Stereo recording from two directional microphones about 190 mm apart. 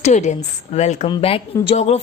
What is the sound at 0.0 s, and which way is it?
A woman's voice, 40° left (ahead or behind).